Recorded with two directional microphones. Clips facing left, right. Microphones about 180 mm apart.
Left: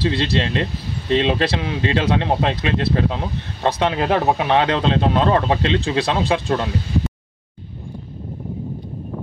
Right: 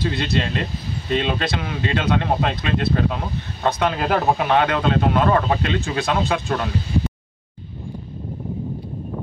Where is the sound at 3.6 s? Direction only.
25° left (ahead or behind).